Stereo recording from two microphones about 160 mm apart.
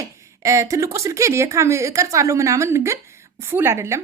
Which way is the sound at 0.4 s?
20° right (ahead or behind).